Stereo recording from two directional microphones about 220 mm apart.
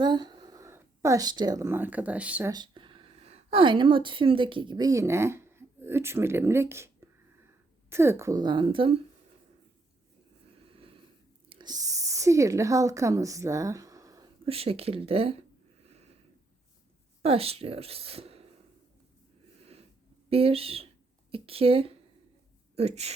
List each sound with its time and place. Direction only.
0.0 s speech: 20° right (ahead or behind)
2.5 s a woman's voice: 20° right (ahead or behind)
10.7 s a sound: 25° right (ahead or behind)
11.4 s speech: 20° right (ahead or behind)
14.4 s a woman's voice: 25° right (ahead or behind)
17.2 s a woman's voice: 25° right (ahead or behind)
20.3 s speech: 25° right (ahead or behind)